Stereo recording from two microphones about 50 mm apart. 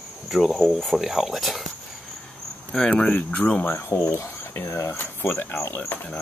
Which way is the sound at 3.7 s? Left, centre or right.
Left.